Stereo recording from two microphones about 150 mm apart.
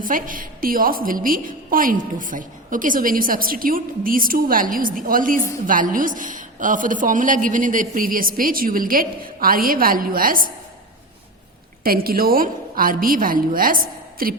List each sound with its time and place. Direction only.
0.0 s a woman's voice: 65° right (ahead or behind)
11.8 s a woman's voice: 75° right (ahead or behind)